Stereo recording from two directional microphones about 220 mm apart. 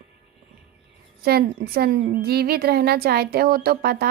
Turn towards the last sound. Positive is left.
turn(degrees=-45)  # may be behind; listen again after turning